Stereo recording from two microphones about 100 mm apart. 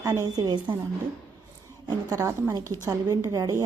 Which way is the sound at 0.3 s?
45° right (ahead or behind).